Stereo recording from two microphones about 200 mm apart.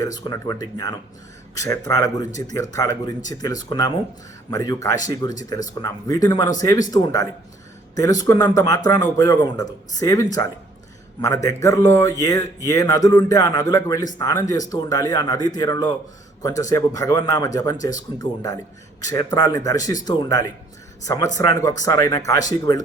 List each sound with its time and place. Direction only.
0.0 s a man's voice: 20° left (ahead or behind)